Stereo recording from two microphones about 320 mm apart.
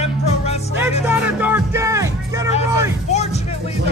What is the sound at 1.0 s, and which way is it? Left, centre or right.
Music, centre.